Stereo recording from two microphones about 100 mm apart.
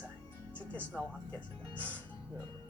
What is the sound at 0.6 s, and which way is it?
Speech, 15° left (ahead or behind).